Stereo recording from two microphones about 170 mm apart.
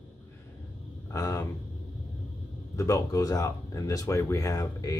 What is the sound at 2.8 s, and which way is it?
Speech, 20° left (ahead or behind).